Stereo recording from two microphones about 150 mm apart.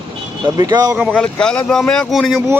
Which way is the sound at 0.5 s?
25° right (ahead or behind).